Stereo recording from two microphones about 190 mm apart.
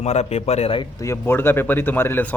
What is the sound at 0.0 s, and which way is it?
Speech, 35° left (ahead or behind).